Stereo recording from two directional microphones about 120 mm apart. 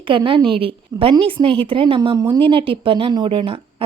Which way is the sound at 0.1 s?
45° right (ahead or behind).